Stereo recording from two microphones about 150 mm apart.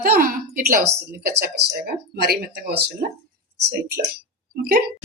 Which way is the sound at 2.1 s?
90° right.